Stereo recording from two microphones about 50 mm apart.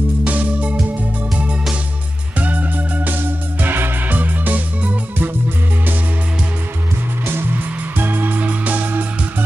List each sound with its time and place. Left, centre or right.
0.2 s music: right
2.3 s music: right
7.2 s music: right